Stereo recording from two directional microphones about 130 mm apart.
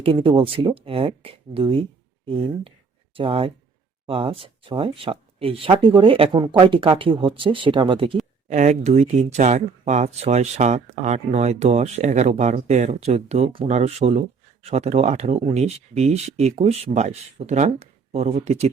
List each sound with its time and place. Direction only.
0.0 s speech: 45° right (ahead or behind)
8.4 s speech: 65° right (ahead or behind)